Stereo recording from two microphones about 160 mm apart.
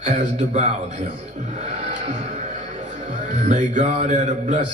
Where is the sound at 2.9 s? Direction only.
55° right (ahead or behind).